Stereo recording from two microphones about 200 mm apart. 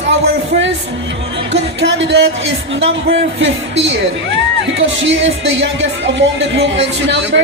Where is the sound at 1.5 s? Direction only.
60° right (ahead or behind).